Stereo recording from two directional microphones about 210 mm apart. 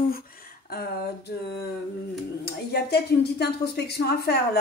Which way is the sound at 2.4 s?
50° left (ahead or behind).